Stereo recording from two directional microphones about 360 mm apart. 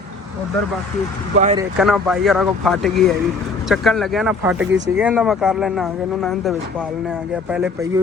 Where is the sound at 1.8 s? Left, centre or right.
Centre.